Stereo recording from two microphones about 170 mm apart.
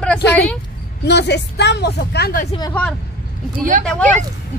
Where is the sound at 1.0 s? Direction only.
85° left.